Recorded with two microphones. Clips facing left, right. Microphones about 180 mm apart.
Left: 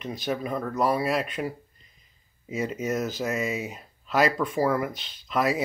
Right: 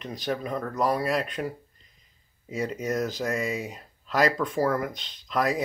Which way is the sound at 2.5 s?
5° left (ahead or behind).